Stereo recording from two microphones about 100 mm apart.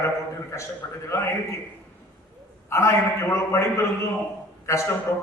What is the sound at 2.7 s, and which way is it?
Mantra, 25° left (ahead or behind).